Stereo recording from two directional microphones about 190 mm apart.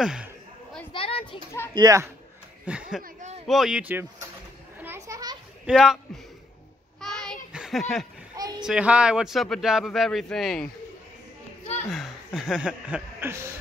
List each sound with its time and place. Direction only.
0.0 s a man's voice: 5° right (ahead or behind)
0.9 s children playing: 30° left (ahead or behind)
1.7 s speech: 20° right (ahead or behind)
2.6 s speech: 5° right (ahead or behind)
3.0 s a sound: 40° right (ahead or behind)
3.4 s a man's voice: centre (ahead or behind)
4.8 s children playing: 15° right (ahead or behind)
5.7 s a man's voice: centre (ahead or behind)
7.0 s a sound: centre (ahead or behind)
8.4 s a sound: 20° right (ahead or behind)
8.6 s a man's voice: 5° right (ahead or behind)
11.9 s speech: centre (ahead or behind)